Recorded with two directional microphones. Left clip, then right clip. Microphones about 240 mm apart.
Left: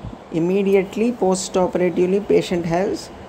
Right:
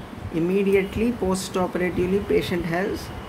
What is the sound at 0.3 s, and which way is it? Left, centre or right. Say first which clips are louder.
Speech: left 3 dB; centre.